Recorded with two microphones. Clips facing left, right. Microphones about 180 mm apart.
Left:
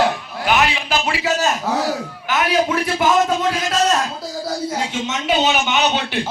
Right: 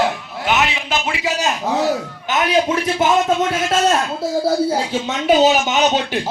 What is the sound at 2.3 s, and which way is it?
Speech, 20° right (ahead or behind).